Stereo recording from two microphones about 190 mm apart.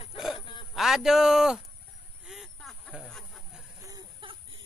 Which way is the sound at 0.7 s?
Centre (ahead or behind).